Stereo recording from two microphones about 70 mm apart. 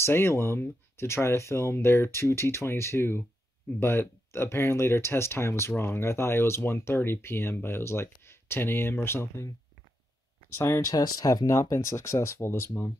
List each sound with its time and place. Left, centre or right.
0.0 s speech: left
10.6 s speech: left
10.9 s speech: left
11.7 s speech: left